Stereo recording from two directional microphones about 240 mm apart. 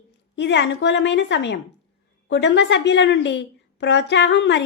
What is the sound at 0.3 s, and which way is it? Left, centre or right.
A woman's voice, left.